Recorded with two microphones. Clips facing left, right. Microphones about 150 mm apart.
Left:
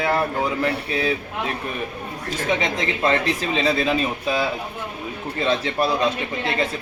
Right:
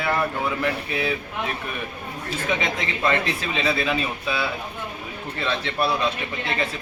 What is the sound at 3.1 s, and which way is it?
Speech, 35° left (ahead or behind).